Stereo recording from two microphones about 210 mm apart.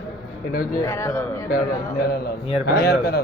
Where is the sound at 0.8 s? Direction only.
15° left (ahead or behind).